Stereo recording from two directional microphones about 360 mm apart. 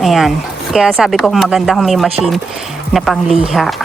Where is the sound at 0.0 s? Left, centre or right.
Centre.